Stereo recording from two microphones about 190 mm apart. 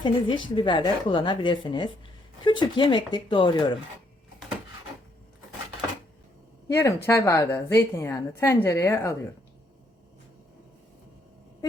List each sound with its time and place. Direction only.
0.0 s a woman's voice: 25° left (ahead or behind)
6.7 s a woman's voice: 15° left (ahead or behind)